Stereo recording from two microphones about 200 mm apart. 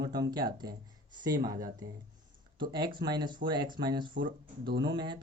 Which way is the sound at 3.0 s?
20° right (ahead or behind).